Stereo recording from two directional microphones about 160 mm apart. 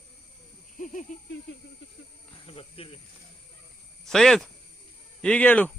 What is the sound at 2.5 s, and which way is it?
Snake, 35° left (ahead or behind).